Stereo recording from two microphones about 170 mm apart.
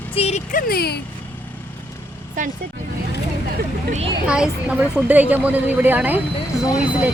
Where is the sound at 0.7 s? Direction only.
70° left (ahead or behind).